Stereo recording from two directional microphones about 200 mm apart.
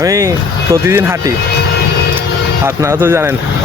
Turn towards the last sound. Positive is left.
turn(degrees=-10)  # may be behind; listen again after turning